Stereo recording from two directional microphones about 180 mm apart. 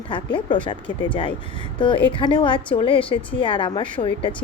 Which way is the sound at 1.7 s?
25° left (ahead or behind).